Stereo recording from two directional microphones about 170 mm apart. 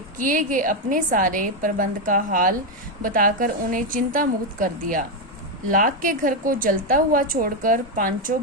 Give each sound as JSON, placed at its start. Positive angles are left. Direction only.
{"t": 0.2, "sound": "a woman's voice", "side_deg": -50}